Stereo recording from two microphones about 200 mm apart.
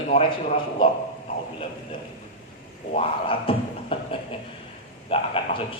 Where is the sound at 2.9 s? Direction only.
30° left (ahead or behind).